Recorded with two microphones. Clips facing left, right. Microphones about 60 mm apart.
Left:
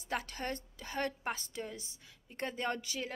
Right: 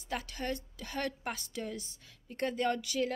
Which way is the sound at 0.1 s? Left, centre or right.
Left.